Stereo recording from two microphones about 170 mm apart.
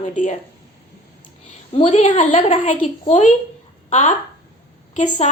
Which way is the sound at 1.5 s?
40° left (ahead or behind).